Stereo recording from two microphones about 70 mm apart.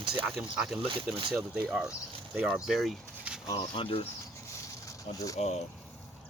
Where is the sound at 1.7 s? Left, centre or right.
Centre.